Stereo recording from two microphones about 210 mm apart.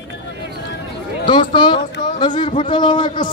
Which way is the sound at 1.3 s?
20° left (ahead or behind).